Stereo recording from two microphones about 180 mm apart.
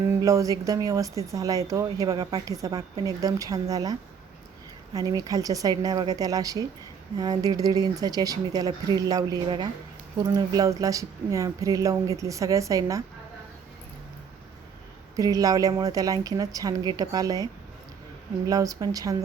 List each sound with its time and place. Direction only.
0.1 s speech: 20° right (ahead or behind)
4.9 s speech: 20° right (ahead or behind)
15.1 s speech: 20° right (ahead or behind)